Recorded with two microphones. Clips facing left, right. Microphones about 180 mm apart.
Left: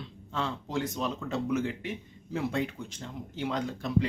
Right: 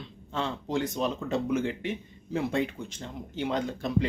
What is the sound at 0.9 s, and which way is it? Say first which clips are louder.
Speech: right 3 dB; 20° right (ahead or behind).